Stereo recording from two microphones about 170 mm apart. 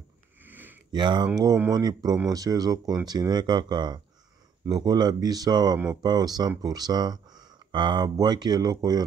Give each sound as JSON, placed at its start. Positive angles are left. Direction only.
{"t": 0.4, "sound": "sniff", "side_deg": -10}
{"t": 0.9, "sound": "speech", "side_deg": -25}